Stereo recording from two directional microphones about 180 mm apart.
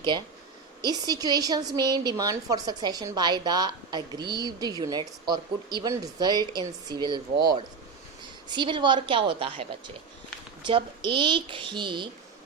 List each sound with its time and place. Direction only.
0.8 s a woman's voice: 20° right (ahead or behind)